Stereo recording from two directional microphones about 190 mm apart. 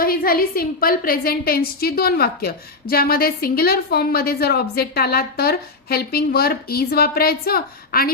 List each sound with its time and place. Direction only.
0.0 s a woman's voice: 50° left (ahead or behind)